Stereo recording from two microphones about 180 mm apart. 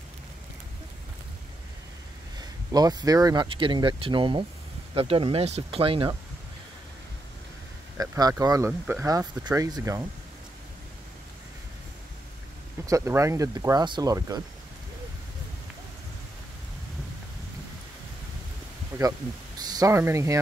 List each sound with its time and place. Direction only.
2.3 s speech: 20° right (ahead or behind)
8.0 s speech: 20° right (ahead or behind)
12.8 s speech: 15° right (ahead or behind)
18.9 s a sound: 10° right (ahead or behind)
19.6 s speech: 20° right (ahead or behind)